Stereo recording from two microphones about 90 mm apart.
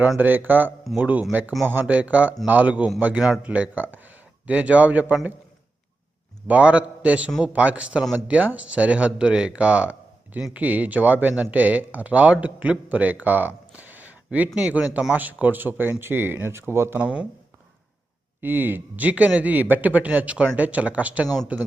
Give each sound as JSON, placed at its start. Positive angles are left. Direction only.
{"t": 0.2, "sound": "speech", "side_deg": -20}
{"t": 6.5, "sound": "speech", "side_deg": -15}
{"t": 17.0, "sound": "speech", "side_deg": -15}
{"t": 18.3, "sound": "speech", "side_deg": -20}